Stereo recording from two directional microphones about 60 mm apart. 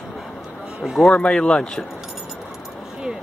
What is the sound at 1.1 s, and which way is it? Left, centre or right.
Speech, centre.